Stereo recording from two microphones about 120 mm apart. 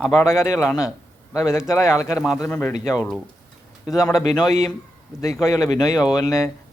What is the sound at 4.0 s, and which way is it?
A man's voice, 30° left (ahead or behind).